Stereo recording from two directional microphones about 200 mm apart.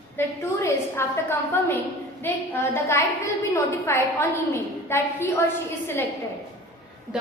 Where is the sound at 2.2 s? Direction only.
10° left (ahead or behind).